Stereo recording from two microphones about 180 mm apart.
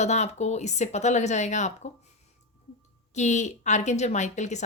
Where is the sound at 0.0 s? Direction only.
40° left (ahead or behind).